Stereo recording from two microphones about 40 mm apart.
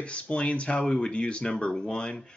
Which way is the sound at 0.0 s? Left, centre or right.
Left.